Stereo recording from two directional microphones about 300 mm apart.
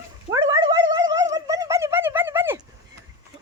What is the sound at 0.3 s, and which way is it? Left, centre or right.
Cat, centre.